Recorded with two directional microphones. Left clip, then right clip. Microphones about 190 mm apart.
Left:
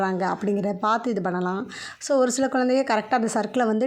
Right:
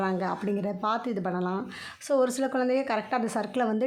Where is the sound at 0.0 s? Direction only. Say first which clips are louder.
Left 5 dB; 25° left (ahead or behind).